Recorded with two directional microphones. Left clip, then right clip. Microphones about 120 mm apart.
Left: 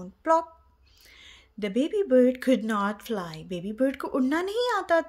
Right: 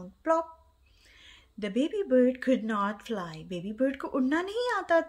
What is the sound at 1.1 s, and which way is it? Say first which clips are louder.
A woman's voice: left 3 dB; 25° left (ahead or behind).